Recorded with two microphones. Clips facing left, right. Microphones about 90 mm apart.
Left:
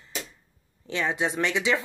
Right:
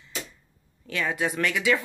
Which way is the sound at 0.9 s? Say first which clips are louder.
Left 1 dB; 25° left (ahead or behind).